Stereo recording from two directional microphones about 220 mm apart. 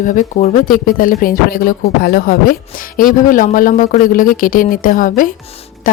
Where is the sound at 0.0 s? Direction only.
35° left (ahead or behind).